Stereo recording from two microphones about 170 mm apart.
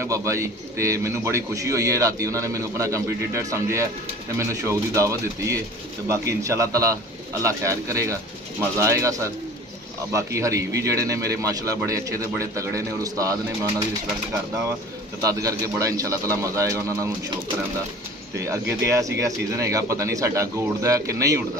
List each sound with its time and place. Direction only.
0.0 s a man's voice: 15° right (ahead or behind)
15.2 s a man's voice: 20° right (ahead or behind)
18.3 s a man's voice: 15° right (ahead or behind)